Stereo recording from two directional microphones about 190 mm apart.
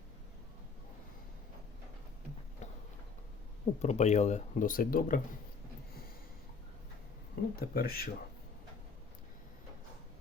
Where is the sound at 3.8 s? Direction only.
35° left (ahead or behind).